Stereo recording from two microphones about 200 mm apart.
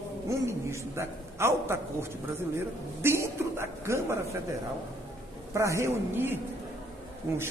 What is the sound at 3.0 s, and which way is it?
A woman's voice, 15° right (ahead or behind).